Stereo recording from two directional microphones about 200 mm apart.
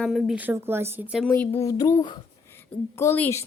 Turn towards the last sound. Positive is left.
turn(degrees=10)  # may be behind; listen again after turning